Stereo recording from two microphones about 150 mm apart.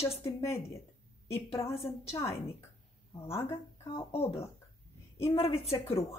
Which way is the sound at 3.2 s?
15° left (ahead or behind).